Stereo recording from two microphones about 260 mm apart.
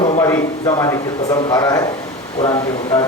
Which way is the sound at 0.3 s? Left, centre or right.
Centre.